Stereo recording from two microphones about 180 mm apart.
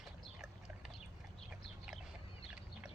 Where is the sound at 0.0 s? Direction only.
Centre (ahead or behind).